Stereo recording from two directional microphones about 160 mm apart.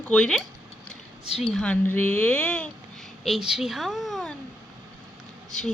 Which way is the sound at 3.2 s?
Centre (ahead or behind).